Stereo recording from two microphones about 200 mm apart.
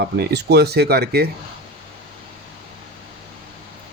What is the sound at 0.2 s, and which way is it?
Speech, 55° right (ahead or behind).